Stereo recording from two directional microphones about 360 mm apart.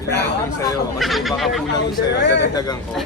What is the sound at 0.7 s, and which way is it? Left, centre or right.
Speech, centre.